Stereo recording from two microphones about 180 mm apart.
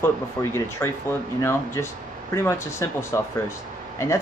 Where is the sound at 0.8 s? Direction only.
10° left (ahead or behind).